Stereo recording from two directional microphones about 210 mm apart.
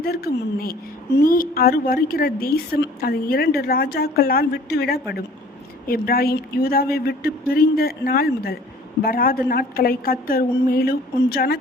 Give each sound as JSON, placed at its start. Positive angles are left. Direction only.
{"t": 0.0, "sound": "a woman's voice", "side_deg": 45}